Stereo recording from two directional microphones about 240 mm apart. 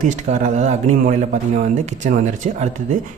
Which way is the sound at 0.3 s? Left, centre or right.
Right.